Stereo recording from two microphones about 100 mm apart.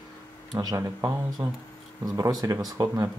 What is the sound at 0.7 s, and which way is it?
Speech, 25° right (ahead or behind).